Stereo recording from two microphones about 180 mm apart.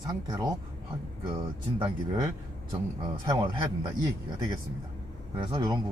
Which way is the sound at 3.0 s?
20° right (ahead or behind).